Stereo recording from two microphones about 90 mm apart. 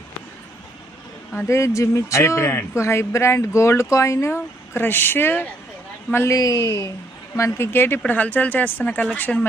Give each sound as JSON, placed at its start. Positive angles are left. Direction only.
{"t": 1.5, "sound": "a man's voice", "side_deg": 35}
{"t": 6.3, "sound": "a man's voice", "side_deg": 40}